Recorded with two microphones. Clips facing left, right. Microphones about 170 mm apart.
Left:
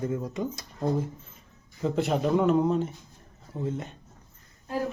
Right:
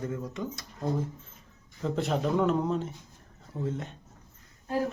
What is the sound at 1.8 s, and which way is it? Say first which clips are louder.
Speech: left 3 dB; 5° left (ahead or behind).